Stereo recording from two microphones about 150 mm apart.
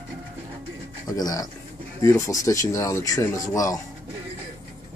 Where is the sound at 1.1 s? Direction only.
25° left (ahead or behind).